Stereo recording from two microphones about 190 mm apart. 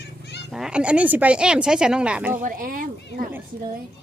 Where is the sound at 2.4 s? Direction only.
45° right (ahead or behind).